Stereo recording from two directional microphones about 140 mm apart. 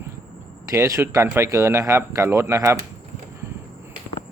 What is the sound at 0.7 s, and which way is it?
A man's voice, 20° right (ahead or behind).